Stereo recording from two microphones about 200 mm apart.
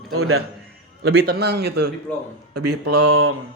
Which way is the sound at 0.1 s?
90° right.